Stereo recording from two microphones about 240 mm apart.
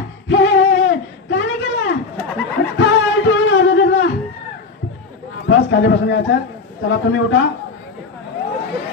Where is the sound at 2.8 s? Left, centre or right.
Left.